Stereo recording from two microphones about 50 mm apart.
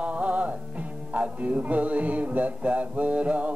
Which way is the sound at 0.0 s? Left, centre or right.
Right.